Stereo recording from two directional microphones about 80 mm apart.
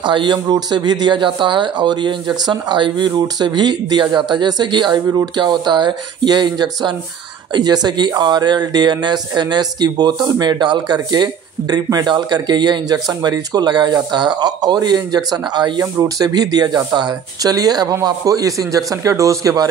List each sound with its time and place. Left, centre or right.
0.0 s speech: right
3.1 s speech: right
5.0 s speech: right
15.8 s speech: right